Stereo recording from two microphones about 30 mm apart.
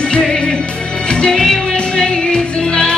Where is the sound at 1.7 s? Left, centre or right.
Left.